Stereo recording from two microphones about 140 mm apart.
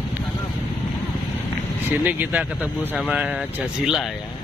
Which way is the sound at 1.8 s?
10° right (ahead or behind).